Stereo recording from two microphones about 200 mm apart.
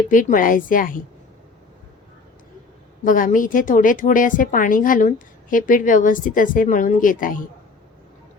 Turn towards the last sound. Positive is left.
turn(degrees=45)  # may be behind; listen again after turning